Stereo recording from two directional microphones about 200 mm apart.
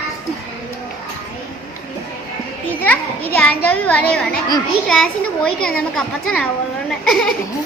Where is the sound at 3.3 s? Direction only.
10° left (ahead or behind).